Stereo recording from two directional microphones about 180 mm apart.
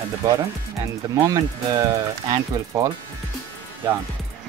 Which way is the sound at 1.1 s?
20° right (ahead or behind).